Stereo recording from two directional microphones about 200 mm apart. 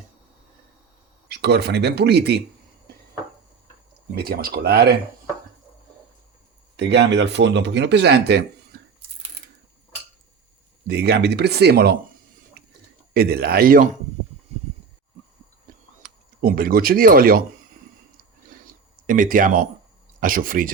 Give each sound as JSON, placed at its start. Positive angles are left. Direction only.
{"t": 1.3, "sound": "speech", "side_deg": -55}
{"t": 4.1, "sound": "speech", "side_deg": -50}
{"t": 6.7, "sound": "speech", "side_deg": -60}
{"t": 10.8, "sound": "speech", "side_deg": -55}
{"t": 13.1, "sound": "speech", "side_deg": -50}
{"t": 16.0, "sound": "speech", "side_deg": -45}
{"t": 19.0, "sound": "speech", "side_deg": -45}